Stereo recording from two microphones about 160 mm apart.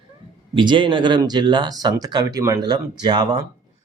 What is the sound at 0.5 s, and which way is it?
Speech, 30° right (ahead or behind).